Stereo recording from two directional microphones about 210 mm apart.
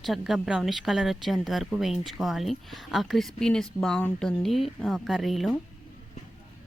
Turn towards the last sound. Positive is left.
turn(degrees=0)  # may be behind; listen again after turning